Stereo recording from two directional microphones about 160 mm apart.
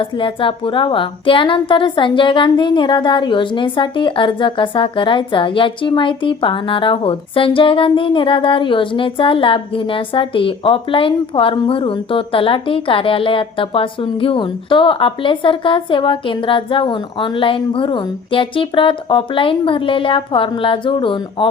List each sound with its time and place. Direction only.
0.0 s speech: 35° left (ahead or behind)